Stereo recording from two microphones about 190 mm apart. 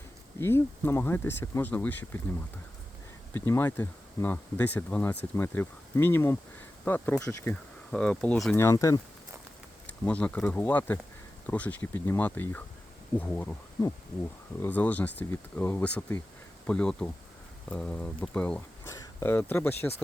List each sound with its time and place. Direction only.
0.3 s speech: 15° left (ahead or behind)
3.3 s speech: 10° left (ahead or behind)
8.6 s speech: 15° left (ahead or behind)
9.8 s speech: 5° left (ahead or behind)